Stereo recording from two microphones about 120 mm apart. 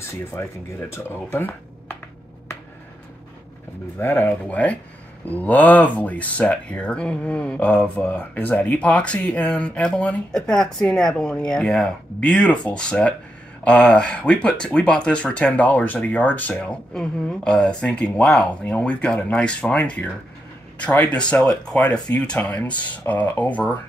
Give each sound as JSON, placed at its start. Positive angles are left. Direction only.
{"t": 0.0, "sound": "speech", "side_deg": 20}
{"t": 4.0, "sound": "speech", "side_deg": 15}